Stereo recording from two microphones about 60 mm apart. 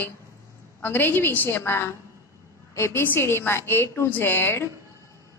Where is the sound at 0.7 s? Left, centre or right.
Left.